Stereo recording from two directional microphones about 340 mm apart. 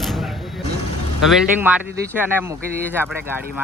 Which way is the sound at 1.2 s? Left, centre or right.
Centre.